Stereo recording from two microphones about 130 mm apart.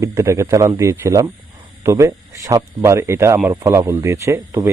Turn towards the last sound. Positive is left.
turn(degrees=-20)  # may be behind; listen again after turning